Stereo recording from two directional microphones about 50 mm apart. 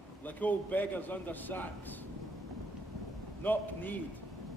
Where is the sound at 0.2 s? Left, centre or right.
Left.